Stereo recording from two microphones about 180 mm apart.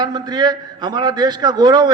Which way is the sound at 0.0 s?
25° right (ahead or behind).